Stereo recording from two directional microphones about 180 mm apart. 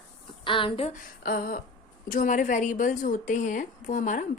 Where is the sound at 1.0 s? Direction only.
55° left (ahead or behind).